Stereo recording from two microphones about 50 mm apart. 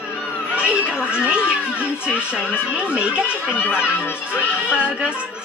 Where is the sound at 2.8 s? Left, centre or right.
Right.